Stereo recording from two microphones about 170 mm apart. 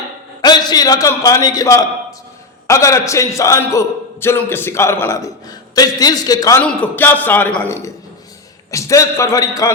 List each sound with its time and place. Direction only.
0.4 s a man's voice: 20° left (ahead or behind)
6.6 s a man's voice: 5° left (ahead or behind)